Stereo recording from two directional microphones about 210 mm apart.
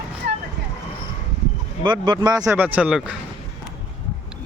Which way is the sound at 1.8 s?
20° right (ahead or behind).